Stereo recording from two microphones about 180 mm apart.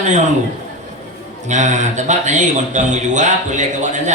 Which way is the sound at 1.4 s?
40° right (ahead or behind).